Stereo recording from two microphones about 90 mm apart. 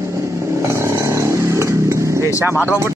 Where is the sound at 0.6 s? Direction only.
30° right (ahead or behind).